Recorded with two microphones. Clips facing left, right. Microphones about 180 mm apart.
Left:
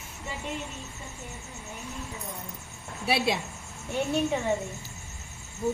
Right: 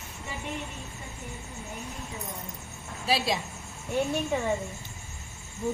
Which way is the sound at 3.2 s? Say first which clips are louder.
Left 2 dB; 60° left (ahead or behind).